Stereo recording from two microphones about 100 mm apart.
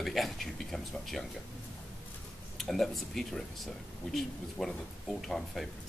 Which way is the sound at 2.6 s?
Centre (ahead or behind).